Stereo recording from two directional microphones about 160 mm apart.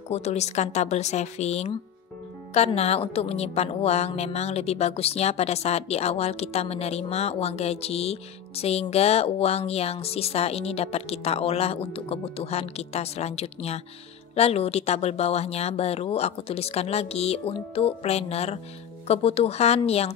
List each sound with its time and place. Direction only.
0.1 s a woman's voice: 45° left (ahead or behind)